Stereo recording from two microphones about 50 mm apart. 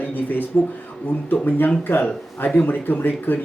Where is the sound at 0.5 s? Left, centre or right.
Left.